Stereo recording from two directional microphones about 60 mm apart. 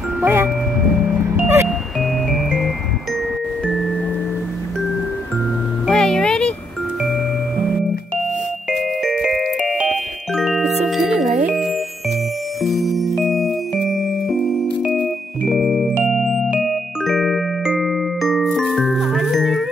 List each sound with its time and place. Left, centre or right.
0.2 s speech: right
1.3 s music: right
5.9 s music: centre
8.7 s music: centre
16.5 s glockenspiel: centre
18.9 s music: centre